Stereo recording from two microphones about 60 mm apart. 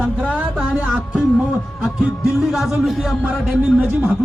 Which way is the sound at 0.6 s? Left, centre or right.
Centre.